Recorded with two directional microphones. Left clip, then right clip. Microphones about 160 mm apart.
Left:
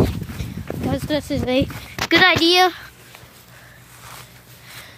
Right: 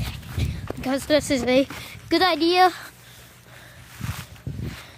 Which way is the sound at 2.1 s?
25° right (ahead or behind).